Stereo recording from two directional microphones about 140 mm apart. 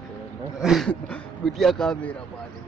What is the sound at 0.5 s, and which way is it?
Speech, centre (ahead or behind).